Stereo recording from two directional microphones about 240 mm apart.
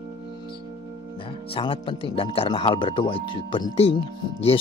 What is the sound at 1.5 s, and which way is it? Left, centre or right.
Speech, left.